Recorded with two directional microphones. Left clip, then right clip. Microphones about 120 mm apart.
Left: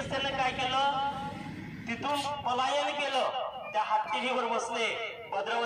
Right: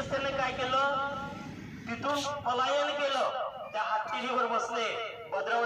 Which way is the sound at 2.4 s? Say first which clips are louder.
Right 1 dB; 30° left (ahead or behind).